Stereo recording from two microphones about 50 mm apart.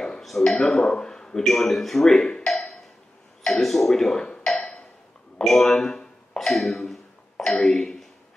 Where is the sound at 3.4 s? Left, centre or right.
Centre.